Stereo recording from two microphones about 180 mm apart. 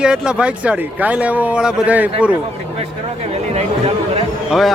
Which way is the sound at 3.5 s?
35° right (ahead or behind).